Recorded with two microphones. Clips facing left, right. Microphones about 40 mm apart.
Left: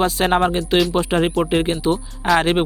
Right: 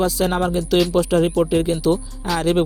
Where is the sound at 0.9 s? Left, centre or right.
Left.